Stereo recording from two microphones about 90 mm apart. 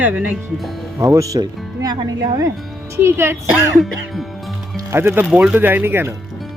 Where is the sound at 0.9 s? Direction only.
35° right (ahead or behind).